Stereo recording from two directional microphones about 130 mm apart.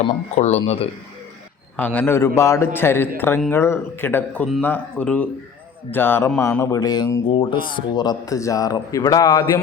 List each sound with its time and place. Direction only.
0.0 s speech: 55° left (ahead or behind)
1.7 s a man's voice: 10° left (ahead or behind)
2.1 s a sound: 20° left (ahead or behind)
2.7 s speech: 15° left (ahead or behind)
6.6 s a sound: 25° left (ahead or behind)
7.3 s a man's voice: 40° left (ahead or behind)